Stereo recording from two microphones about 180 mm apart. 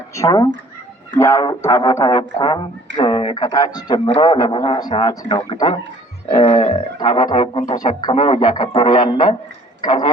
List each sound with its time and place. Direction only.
0.2 s a man's voice: 20° left (ahead or behind)